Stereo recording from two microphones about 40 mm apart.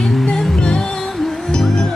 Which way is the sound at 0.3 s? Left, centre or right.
Centre.